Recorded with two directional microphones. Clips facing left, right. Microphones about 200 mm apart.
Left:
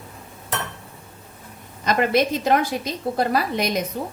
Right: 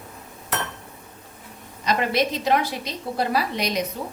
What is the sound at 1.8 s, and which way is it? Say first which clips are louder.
A woman's voice: left 3 dB; 50° left (ahead or behind).